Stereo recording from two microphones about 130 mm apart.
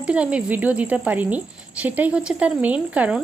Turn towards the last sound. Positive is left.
turn(degrees=-10)  # may be behind; listen again after turning